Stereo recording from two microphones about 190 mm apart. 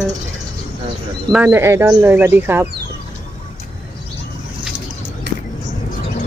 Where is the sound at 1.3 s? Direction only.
10° right (ahead or behind).